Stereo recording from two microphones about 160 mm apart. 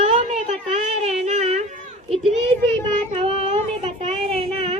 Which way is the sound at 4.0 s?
40° right (ahead or behind).